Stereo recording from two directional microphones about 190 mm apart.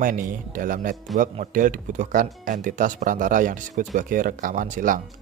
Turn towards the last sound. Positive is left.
turn(degrees=-45)  # may be behind; listen again after turning